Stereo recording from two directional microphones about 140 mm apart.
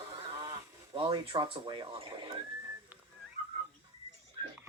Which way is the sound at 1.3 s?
35° right (ahead or behind).